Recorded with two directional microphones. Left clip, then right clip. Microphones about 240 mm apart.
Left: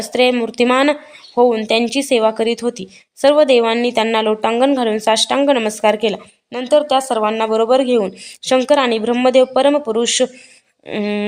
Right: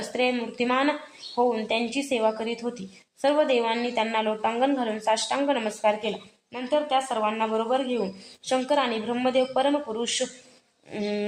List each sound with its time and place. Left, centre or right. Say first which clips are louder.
0.1 s speech: left 12 dB; left